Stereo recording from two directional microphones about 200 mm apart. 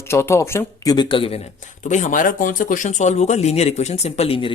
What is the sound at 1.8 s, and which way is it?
Speech, 40° left (ahead or behind).